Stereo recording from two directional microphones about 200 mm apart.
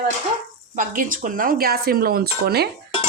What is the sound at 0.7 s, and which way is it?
Speech, 40° right (ahead or behind).